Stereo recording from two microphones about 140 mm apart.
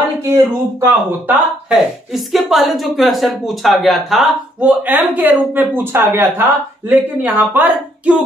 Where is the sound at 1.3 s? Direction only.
5° right (ahead or behind).